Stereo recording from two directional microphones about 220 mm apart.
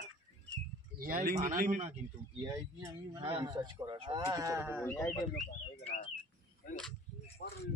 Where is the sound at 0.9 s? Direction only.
40° right (ahead or behind).